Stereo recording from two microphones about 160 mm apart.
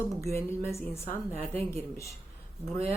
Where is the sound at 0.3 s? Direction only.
15° left (ahead or behind).